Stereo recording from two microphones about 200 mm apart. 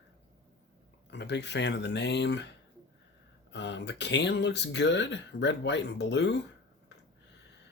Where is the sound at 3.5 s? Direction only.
60° left (ahead or behind).